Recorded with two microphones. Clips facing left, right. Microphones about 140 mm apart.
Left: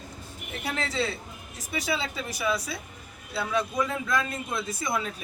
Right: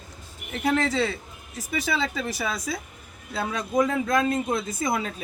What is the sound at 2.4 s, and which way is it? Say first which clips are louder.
A man's voice: even; 45° right (ahead or behind).